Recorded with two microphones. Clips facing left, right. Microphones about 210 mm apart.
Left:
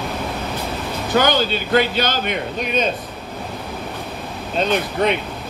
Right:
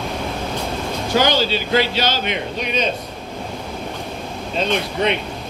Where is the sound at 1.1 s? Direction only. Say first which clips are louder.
Even; 50° left (ahead or behind).